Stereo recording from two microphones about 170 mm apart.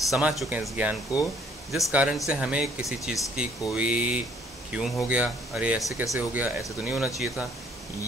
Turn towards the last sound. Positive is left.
turn(degrees=0)  # may be behind; listen again after turning